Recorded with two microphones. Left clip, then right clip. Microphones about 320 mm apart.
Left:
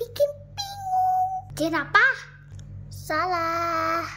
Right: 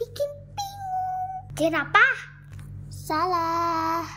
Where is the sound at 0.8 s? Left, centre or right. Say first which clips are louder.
Left 6 dB; centre.